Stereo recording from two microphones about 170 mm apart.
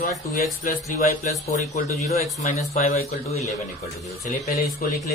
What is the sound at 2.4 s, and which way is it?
Speech, 40° left (ahead or behind).